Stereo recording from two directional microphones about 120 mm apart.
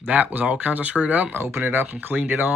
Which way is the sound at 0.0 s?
15° right (ahead or behind).